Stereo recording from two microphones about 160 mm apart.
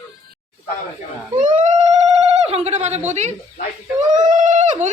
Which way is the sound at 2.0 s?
40° right (ahead or behind).